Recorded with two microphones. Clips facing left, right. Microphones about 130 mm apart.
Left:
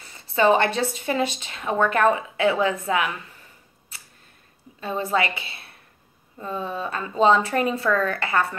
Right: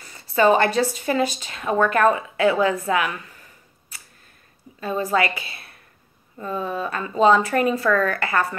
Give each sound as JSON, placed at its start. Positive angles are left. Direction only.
{"t": 0.3, "sound": "speech", "side_deg": 25}
{"t": 4.8, "sound": "speech", "side_deg": 25}